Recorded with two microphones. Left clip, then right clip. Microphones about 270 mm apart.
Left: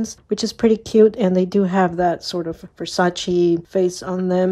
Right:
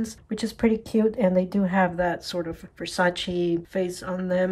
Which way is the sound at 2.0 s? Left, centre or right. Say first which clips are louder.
Left 6 dB; centre.